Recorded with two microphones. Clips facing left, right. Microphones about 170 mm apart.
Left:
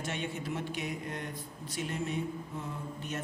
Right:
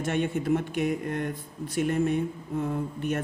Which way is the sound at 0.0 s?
55° right (ahead or behind).